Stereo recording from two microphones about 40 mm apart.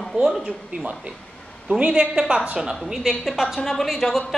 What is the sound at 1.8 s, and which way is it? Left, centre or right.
Speech, right.